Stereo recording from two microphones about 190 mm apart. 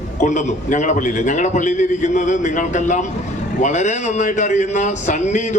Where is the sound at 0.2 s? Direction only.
40° left (ahead or behind).